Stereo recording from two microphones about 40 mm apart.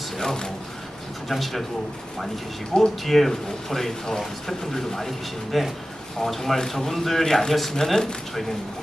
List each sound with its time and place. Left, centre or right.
0.2 s speech: centre
1.3 s speech: centre
3.0 s speech: centre
7.3 s speech: centre